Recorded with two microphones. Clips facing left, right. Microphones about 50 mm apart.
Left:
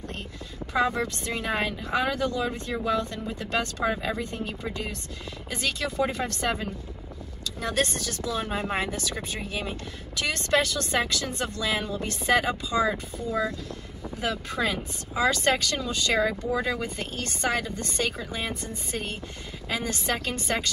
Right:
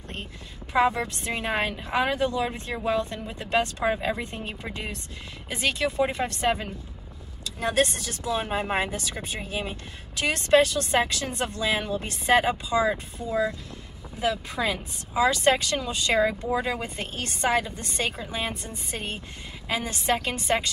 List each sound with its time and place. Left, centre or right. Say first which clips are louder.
0.7 s speech: right 2 dB; right